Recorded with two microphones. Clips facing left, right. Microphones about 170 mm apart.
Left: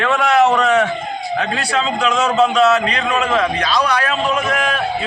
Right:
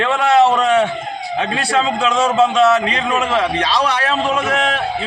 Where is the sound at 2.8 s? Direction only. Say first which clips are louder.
Even; 25° right (ahead or behind).